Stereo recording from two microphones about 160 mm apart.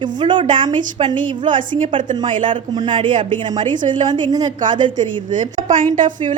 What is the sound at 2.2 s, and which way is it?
Speech, 55° right (ahead or behind).